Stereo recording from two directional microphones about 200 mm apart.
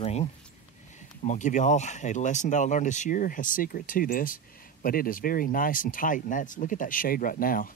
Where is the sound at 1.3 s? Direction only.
35° left (ahead or behind).